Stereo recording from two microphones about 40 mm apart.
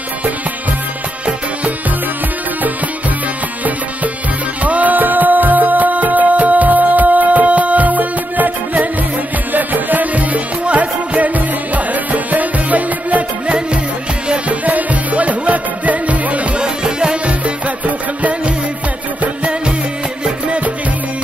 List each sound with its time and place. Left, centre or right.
4.6 s music: right
14.7 s music: right
16.5 s music: right
20.4 s music: right